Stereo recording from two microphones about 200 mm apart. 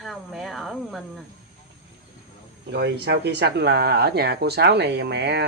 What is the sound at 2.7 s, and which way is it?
Speech, 55° right (ahead or behind).